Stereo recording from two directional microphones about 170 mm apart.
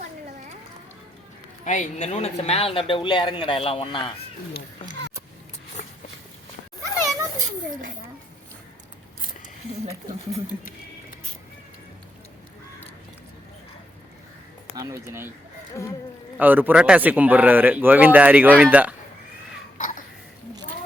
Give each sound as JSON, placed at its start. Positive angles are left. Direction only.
{"t": 1.6, "sound": "speech", "side_deg": 45}
{"t": 14.8, "sound": "a man's voice", "side_deg": -20}
{"t": 15.7, "sound": "speech", "side_deg": 15}
{"t": 16.4, "sound": "a man's voice", "side_deg": -10}